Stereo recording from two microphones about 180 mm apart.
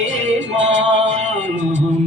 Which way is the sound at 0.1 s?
40° right (ahead or behind).